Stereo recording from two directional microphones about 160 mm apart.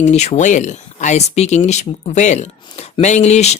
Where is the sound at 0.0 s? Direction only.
40° left (ahead or behind).